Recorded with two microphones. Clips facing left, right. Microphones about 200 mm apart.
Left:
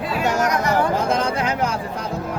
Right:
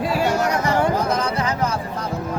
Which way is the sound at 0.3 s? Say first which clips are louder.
Even; 30° right (ahead or behind).